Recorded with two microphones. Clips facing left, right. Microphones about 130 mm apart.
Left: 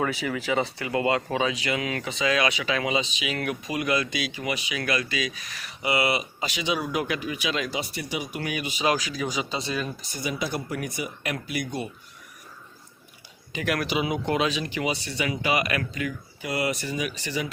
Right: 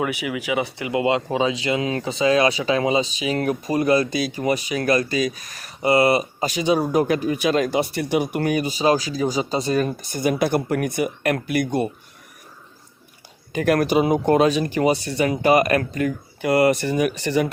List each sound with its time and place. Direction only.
0.0 s speech: 15° right (ahead or behind); by 11.9 s 55° right (ahead or behind)
13.5 s speech: 45° right (ahead or behind)
16.4 s speech: 55° right (ahead or behind)